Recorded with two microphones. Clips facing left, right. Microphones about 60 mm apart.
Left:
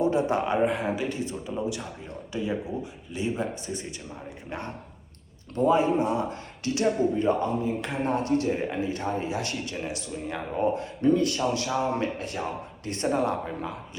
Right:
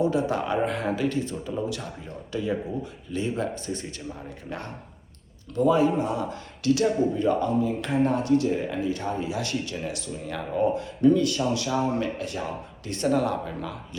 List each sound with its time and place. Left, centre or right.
0.0 s speech: left